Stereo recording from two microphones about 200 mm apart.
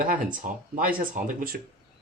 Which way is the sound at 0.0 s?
45° right (ahead or behind).